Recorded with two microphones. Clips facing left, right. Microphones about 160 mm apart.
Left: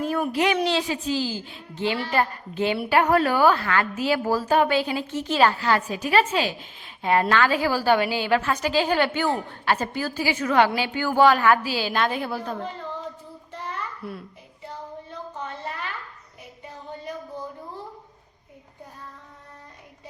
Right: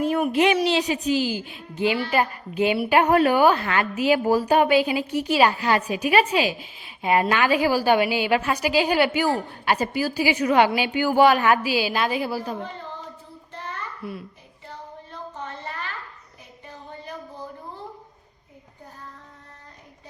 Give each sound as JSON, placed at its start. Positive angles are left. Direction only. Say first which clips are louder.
{"t": 0.0, "sound": "a woman's voice", "louder": "right 3 dB", "side_deg": -20}
{"t": 14.0, "sound": "a child's voice", "louder": "right 1 dB", "side_deg": 0}